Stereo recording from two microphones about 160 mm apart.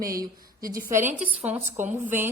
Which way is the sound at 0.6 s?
65° right (ahead or behind).